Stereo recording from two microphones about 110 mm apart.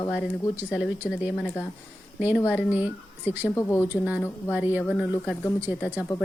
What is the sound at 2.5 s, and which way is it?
Speech, 15° right (ahead or behind).